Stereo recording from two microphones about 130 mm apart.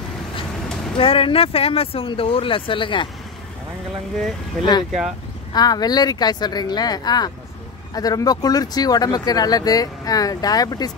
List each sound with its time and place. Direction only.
0.9 s speech: 45° left (ahead or behind)
5.5 s speech: 30° left (ahead or behind)